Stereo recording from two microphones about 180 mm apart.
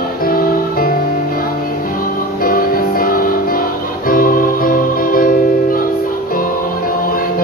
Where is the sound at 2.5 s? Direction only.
55° left (ahead or behind).